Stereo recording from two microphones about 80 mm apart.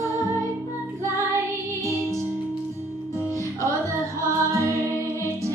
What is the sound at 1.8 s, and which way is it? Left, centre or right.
Music, left.